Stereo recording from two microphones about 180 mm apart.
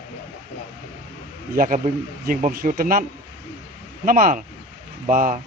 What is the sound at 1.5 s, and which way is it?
Speech, 50° right (ahead or behind).